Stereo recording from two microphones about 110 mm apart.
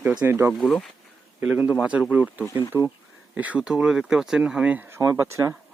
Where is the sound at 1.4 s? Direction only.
10° right (ahead or behind).